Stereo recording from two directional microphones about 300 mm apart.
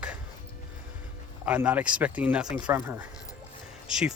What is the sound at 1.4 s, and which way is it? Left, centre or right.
Speech, centre.